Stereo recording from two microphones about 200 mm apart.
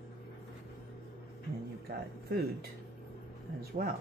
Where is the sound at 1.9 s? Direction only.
50° right (ahead or behind).